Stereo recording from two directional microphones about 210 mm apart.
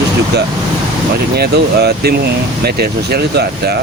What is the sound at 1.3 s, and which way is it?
Speech, 50° right (ahead or behind).